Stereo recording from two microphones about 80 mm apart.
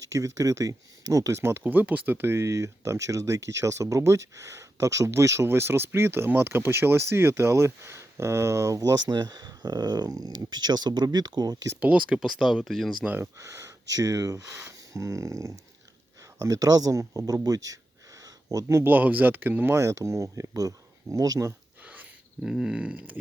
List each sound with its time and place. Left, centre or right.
0.0 s speech: right
11.8 s speech: centre
13.4 s speech: right
13.8 s speech: right
18.4 s speech: right
18.9 s speech: right
19.7 s speech: right
22.4 s a sound: centre